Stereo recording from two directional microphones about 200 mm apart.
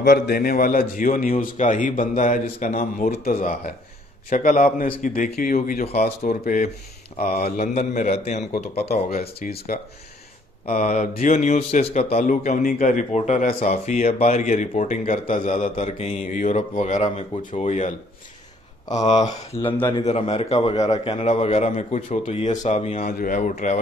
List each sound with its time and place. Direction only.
0.0 s a man's voice: 50° left (ahead or behind)
5.9 s a man's voice: 35° left (ahead or behind)
10.7 s speech: 40° left (ahead or behind)
20.0 s speech: 30° left (ahead or behind)